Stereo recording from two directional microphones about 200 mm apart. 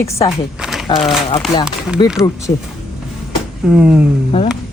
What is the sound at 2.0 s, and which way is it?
Speech, 20° left (ahead or behind).